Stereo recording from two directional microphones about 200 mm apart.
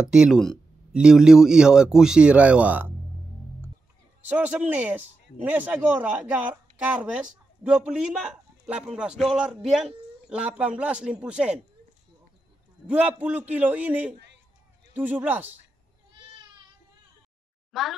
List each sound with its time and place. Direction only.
0.1 s speech: 5° right (ahead or behind)
4.3 s a man's voice: 10° right (ahead or behind)
12.8 s a man's voice: 5° right (ahead or behind)
14.1 s a sound: 60° right (ahead or behind)
15.0 s a man's voice: 10° right (ahead or behind)
17.7 s speech: centre (ahead or behind)